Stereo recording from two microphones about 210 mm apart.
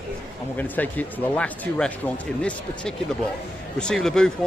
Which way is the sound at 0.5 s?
10° left (ahead or behind).